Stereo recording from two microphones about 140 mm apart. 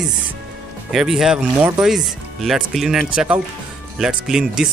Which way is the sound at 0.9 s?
5° right (ahead or behind).